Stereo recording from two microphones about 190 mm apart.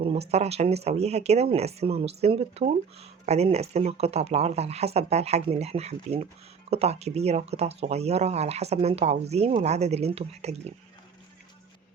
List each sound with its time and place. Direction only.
0.0 s speech: 30° right (ahead or behind)